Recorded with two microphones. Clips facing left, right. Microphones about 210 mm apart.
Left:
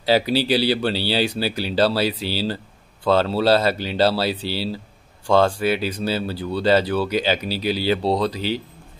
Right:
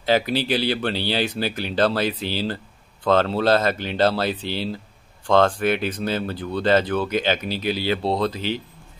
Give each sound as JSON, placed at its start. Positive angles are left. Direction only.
{"t": 0.0, "sound": "speech", "side_deg": 10}
{"t": 7.6, "sound": "speech", "side_deg": 40}